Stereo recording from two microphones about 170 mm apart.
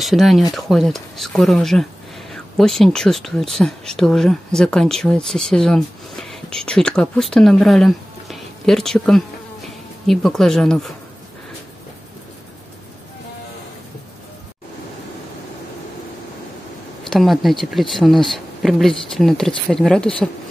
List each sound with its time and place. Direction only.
0.0 s speech: centre (ahead or behind)
17.1 s speech: centre (ahead or behind)